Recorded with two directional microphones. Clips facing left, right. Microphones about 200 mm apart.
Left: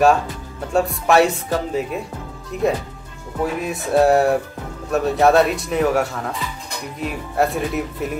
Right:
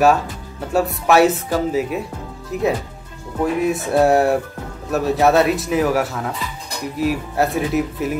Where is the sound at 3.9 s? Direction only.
5° right (ahead or behind).